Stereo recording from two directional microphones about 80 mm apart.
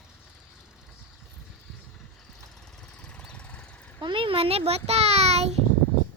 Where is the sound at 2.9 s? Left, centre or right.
Centre.